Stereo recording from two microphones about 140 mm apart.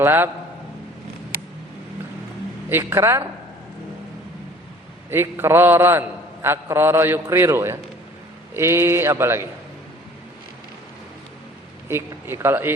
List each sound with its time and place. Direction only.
0.0 s a man's voice: 15° right (ahead or behind)
2.6 s a woman's voice: 15° right (ahead or behind)
5.1 s a man's voice: 15° right (ahead or behind)
11.9 s a man's voice: 15° right (ahead or behind)